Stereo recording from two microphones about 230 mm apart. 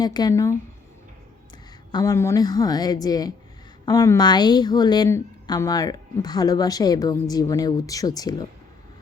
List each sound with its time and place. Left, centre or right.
0.0 s a woman's voice: centre
1.9 s a woman's voice: centre